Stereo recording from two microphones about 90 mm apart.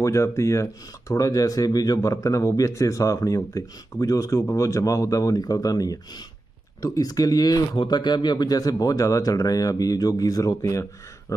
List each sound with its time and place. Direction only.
0.0 s speech: 30° left (ahead or behind)
7.9 s speech: 55° left (ahead or behind); by 11.3 s 35° left (ahead or behind)